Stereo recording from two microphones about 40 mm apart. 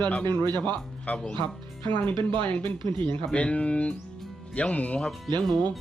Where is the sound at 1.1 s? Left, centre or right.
Left.